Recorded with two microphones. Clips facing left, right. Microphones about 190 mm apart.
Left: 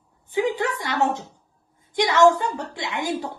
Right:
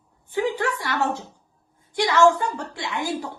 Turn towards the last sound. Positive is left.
turn(degrees=20)  # may be behind; listen again after turning